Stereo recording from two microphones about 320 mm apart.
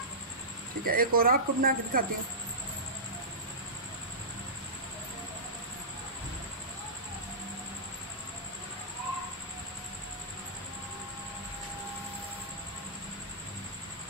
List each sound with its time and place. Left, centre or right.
0.8 s speech: right